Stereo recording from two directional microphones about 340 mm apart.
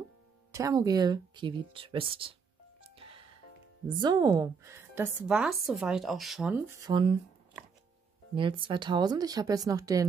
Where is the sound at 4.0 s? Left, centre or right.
Centre.